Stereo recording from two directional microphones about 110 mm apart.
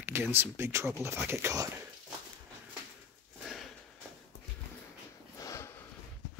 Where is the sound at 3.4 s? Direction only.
Centre (ahead or behind).